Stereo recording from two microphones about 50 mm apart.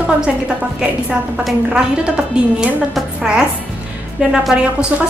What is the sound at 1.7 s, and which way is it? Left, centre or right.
Speech, centre.